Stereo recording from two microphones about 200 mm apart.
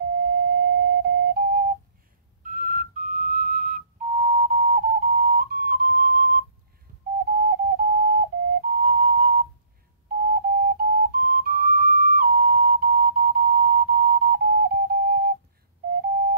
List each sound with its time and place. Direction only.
0.3 s flute: 50° right (ahead or behind)
2.4 s whistle: 40° right (ahead or behind)
10.2 s flute: 50° right (ahead or behind)